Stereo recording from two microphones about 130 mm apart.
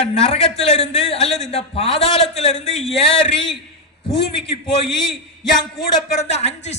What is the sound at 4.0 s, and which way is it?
Speech, 40° left (ahead or behind).